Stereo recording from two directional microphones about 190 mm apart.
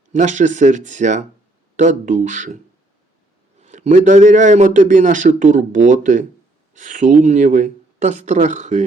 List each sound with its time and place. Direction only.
0.1 s a man's voice: 40° right (ahead or behind)
3.6 s a man's voice: 40° right (ahead or behind)